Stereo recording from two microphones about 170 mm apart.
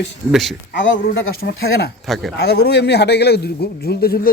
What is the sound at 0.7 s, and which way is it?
Speech, 90° left.